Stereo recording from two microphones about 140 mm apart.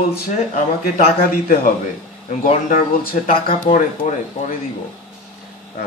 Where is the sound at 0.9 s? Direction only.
90° left.